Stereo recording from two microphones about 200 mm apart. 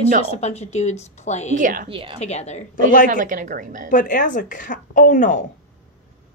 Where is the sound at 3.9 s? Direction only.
40° left (ahead or behind).